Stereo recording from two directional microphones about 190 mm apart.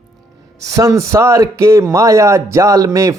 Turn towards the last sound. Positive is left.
turn(degrees=-15)  # may be behind; listen again after turning